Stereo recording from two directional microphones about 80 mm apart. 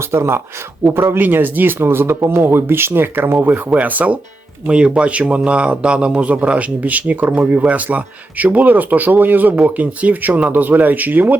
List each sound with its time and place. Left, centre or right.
0.0 s a man's voice: right